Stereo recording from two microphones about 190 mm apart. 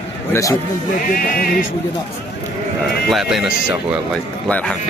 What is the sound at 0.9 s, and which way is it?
Speech, 50° left (ahead or behind).